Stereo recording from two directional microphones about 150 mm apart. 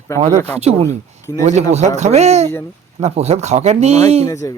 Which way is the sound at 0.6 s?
45° right (ahead or behind).